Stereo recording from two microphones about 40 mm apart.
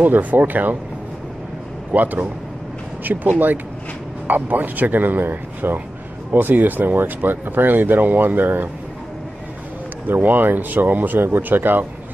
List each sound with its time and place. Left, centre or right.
0.0 s speech: right
1.9 s speech: right
10.2 s speech: right